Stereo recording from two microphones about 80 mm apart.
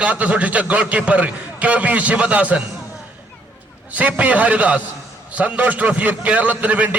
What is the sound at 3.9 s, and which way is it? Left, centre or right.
A man's voice, centre.